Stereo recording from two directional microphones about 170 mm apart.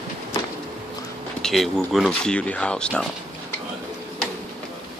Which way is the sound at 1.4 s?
Centre (ahead or behind).